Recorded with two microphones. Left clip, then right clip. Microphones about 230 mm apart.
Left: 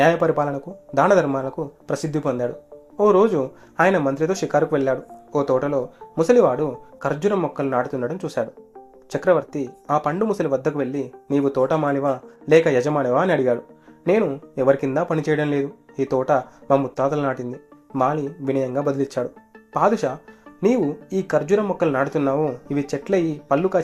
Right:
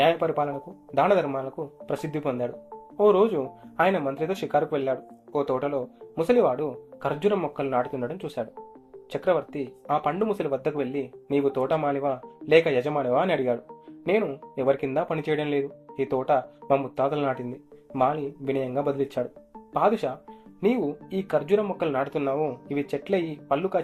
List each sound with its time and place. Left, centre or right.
0.0 s speech: left